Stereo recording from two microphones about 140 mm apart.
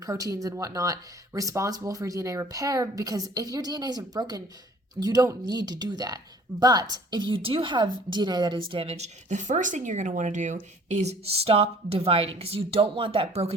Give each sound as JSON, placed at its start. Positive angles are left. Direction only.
{"t": 0.0, "sound": "a woman's voice", "side_deg": -25}
{"t": 8.7, "sound": "speech", "side_deg": -45}